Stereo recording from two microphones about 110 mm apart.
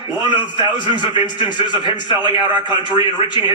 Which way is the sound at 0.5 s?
45° left (ahead or behind).